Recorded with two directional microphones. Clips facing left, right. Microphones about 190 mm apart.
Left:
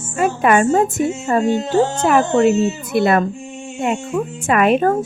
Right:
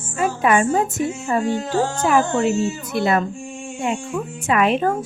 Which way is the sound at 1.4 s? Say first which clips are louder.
Left 5 dB; 25° left (ahead or behind).